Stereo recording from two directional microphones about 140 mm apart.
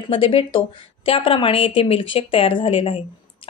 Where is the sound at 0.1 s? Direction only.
40° left (ahead or behind).